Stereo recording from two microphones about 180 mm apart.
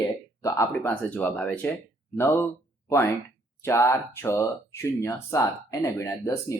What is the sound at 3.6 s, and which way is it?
Speech, 15° left (ahead or behind).